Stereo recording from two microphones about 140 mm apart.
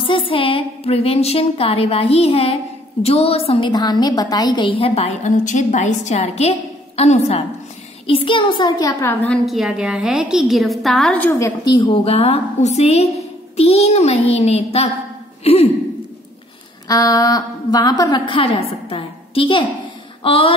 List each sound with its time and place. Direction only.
0.0 s a woman's voice: 40° left (ahead or behind)
8.1 s a child's voice: 40° left (ahead or behind)
9.0 s a woman's voice: 15° left (ahead or behind)
9.5 s a woman's voice: centre (ahead or behind)
11.1 s a woman's voice: 20° left (ahead or behind)
11.7 s a woman's voice: 35° left (ahead or behind)
16.8 s a woman's voice: 25° left (ahead or behind)